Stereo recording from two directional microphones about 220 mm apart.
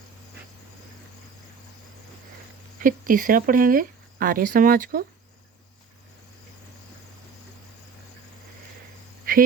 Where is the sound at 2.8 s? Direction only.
40° right (ahead or behind).